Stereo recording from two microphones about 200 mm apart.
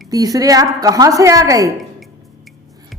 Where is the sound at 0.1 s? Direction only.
20° right (ahead or behind).